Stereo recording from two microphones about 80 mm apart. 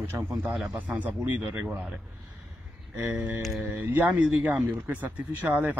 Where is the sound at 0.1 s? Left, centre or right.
Right.